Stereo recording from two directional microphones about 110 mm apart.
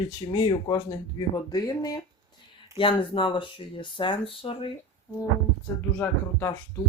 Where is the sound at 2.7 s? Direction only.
50° left (ahead or behind).